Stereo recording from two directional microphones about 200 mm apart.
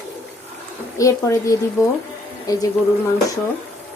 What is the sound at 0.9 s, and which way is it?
Speech, 15° left (ahead or behind).